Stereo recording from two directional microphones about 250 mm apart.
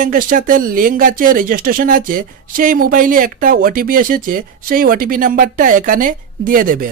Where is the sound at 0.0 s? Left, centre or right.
Right.